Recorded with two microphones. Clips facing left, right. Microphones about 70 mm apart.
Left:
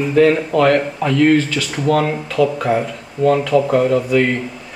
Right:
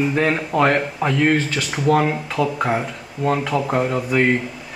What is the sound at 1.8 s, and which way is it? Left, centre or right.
Speech, centre.